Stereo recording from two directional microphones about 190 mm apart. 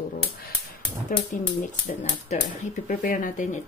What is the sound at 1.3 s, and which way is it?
Speech, 40° left (ahead or behind).